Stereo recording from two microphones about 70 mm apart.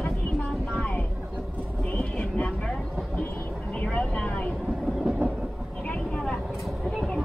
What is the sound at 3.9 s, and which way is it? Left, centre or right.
Vehicle, centre.